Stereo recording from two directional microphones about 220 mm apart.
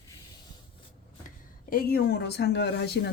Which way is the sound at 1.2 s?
40° left (ahead or behind).